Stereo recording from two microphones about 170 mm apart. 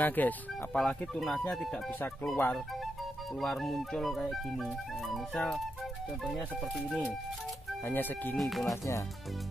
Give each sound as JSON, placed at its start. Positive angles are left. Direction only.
{"t": 0.0, "sound": "speech", "side_deg": 10}
{"t": 7.8, "sound": "speech", "side_deg": 10}
{"t": 8.4, "sound": "speech", "side_deg": 0}
{"t": 8.6, "sound": "speech", "side_deg": 20}